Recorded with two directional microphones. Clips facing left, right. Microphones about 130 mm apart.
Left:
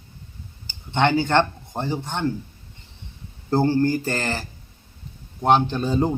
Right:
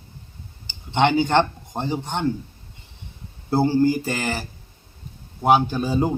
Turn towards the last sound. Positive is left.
turn(degrees=-10)  # may be behind; listen again after turning